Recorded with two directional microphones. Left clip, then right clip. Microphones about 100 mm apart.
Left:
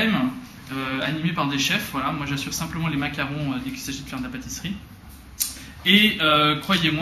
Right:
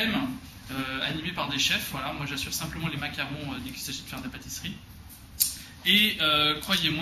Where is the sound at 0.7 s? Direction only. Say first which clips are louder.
Left 4 dB; 40° right (ahead or behind).